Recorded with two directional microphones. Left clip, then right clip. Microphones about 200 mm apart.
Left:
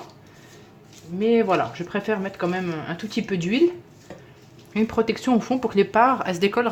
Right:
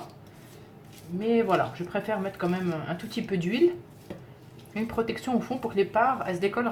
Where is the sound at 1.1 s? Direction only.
40° left (ahead or behind).